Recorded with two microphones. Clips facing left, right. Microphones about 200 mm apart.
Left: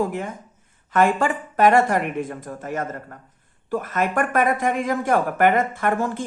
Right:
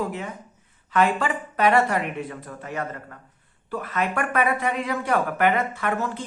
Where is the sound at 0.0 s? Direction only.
50° left (ahead or behind).